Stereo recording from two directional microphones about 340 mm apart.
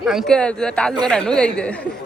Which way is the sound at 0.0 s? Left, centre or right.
Centre.